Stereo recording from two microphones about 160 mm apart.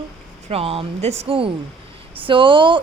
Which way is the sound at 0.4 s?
40° right (ahead or behind).